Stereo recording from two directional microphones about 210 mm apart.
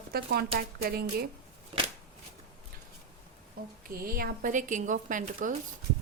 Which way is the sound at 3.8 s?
45° right (ahead or behind).